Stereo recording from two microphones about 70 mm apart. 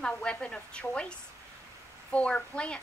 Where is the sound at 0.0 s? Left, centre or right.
Centre.